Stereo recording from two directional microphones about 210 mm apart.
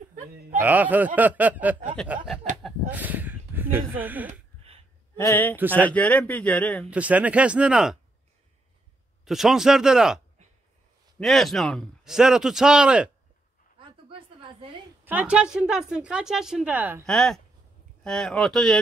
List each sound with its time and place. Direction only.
0.1 s speech: 40° right (ahead or behind)
0.6 s speech: 10° right (ahead or behind)
2.6 s a sound: 10° right (ahead or behind)
4.3 s a sound: 30° right (ahead or behind)
5.1 s a man's voice: 10° left (ahead or behind)
6.9 s a man's voice: 5° right (ahead or behind)
9.2 s a man's voice: centre (ahead or behind)
13.7 s a sound: 25° right (ahead or behind)
15.0 s a man's voice: 5° right (ahead or behind)